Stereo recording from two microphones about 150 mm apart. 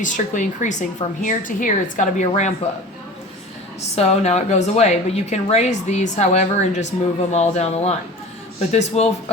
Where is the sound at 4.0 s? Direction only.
45° left (ahead or behind).